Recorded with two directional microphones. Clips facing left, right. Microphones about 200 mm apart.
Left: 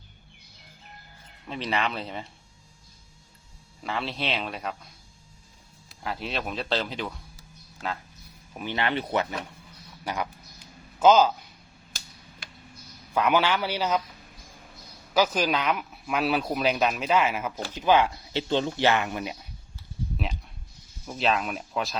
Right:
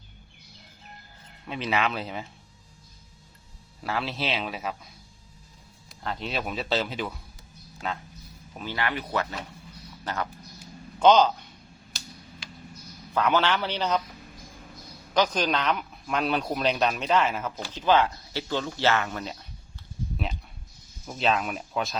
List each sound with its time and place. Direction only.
1.5 s speech: 5° right (ahead or behind)
3.8 s speech: centre (ahead or behind)
5.9 s speech: 5° left (ahead or behind)
8.5 s speech: 20° left (ahead or behind)
10.0 s speech: 10° left (ahead or behind)
12.4 s a sound: 55° left (ahead or behind)
13.1 s speech: 10° left (ahead or behind)
15.1 s speech: 5° left (ahead or behind)
21.1 s speech: centre (ahead or behind)